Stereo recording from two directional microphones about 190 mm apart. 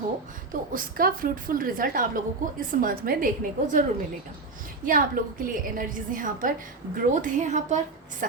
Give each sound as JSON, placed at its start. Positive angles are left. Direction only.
{"t": 0.5, "sound": "a woman's voice", "side_deg": -45}
{"t": 4.9, "sound": "a woman's voice", "side_deg": -45}